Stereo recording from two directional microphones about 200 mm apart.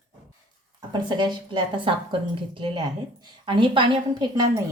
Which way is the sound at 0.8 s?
20° right (ahead or behind).